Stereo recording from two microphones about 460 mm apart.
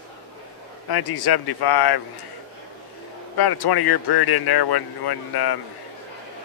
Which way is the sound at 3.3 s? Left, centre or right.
Left.